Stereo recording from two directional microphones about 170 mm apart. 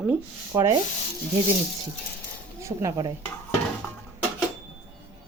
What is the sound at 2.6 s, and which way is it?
Speech, 15° right (ahead or behind).